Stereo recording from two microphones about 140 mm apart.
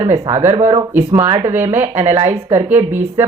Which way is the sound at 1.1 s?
25° right (ahead or behind).